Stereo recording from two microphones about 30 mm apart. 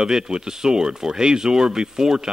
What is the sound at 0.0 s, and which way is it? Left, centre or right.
Speech, right.